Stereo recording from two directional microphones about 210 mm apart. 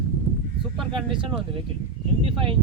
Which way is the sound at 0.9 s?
25° right (ahead or behind).